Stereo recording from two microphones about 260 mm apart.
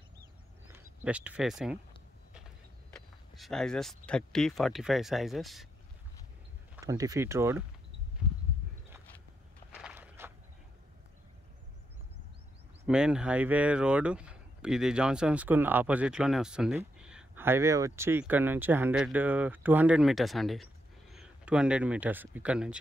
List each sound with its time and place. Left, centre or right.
0.7 s speech: centre
2.9 s speech: centre
6.7 s speech: centre
9.7 s walk: centre
12.8 s speech: centre